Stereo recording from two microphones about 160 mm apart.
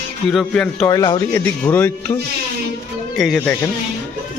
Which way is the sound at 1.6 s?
10° left (ahead or behind).